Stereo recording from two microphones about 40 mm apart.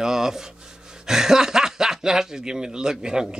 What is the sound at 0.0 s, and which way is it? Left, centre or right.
A man's voice, centre.